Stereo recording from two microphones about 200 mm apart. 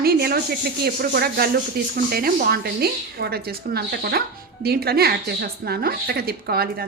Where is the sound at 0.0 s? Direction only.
50° right (ahead or behind).